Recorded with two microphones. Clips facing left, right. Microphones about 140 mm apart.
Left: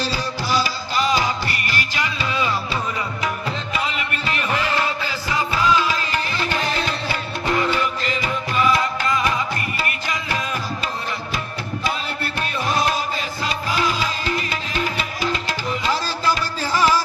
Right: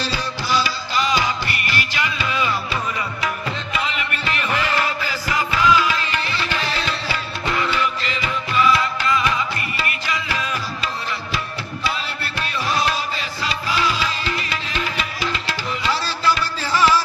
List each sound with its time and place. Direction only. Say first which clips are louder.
0.0 s music: left 1 dB; 40° left (ahead or behind)
12.4 s music: even; 45° left (ahead or behind)